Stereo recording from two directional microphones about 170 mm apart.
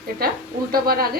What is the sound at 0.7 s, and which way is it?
Speech, 60° right (ahead or behind).